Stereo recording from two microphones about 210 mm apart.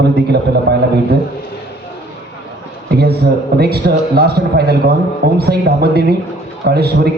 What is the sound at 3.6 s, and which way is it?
A man's voice, 50° right (ahead or behind).